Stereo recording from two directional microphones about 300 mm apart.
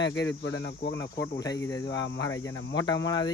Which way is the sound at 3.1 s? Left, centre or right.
Centre.